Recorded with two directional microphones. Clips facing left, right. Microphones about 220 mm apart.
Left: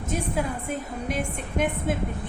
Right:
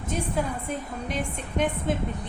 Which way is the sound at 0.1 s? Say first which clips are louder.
Even; 5° left (ahead or behind).